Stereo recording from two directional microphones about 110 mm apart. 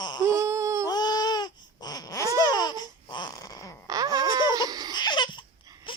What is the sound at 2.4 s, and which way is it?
Babbling, 35° left (ahead or behind).